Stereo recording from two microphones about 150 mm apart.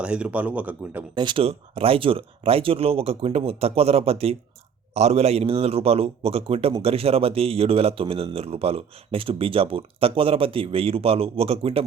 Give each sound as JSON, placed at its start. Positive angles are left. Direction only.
{"t": 0.0, "sound": "a man's voice", "side_deg": -5}
{"t": 1.1, "sound": "a man's voice", "side_deg": -30}